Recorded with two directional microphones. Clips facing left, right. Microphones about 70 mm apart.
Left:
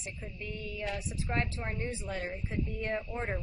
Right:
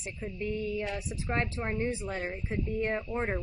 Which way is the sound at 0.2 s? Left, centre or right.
Right.